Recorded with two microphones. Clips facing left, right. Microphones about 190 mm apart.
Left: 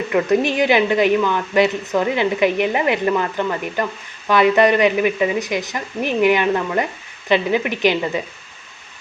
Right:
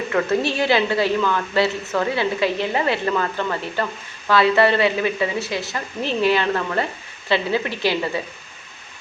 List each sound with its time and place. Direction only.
0.1 s a woman's voice: 15° left (ahead or behind)